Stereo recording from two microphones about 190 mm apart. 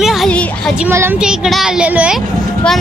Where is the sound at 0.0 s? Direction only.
Centre (ahead or behind).